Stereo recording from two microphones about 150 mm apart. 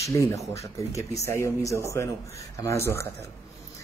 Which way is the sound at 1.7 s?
20° right (ahead or behind).